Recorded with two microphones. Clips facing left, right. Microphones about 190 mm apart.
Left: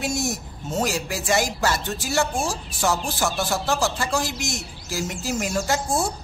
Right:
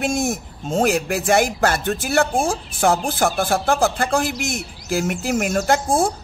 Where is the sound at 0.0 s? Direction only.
55° right (ahead or behind).